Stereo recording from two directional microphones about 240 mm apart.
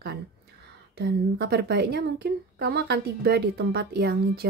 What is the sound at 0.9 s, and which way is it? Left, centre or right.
A woman's voice, right.